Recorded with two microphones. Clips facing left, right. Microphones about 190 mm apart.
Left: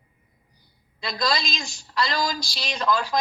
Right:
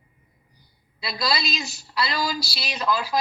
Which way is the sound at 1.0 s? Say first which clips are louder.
Left 1 dB; 5° right (ahead or behind).